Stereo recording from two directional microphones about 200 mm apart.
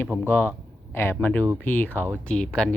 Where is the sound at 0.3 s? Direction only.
10° left (ahead or behind).